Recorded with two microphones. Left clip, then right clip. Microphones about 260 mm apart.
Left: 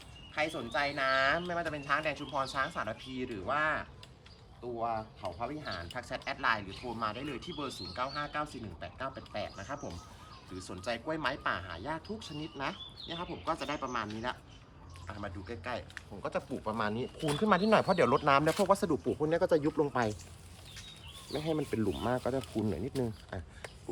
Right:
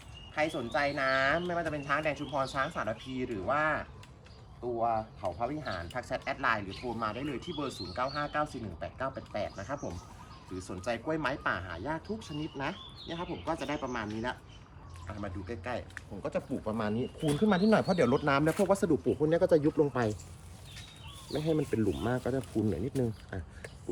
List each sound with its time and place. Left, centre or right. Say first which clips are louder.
0.3 s speech: right 2 dB; centre; by 20.1 s left
21.3 s speech: right 3 dB; left